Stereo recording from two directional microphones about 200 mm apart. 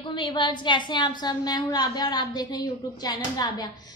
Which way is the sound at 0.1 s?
25° left (ahead or behind).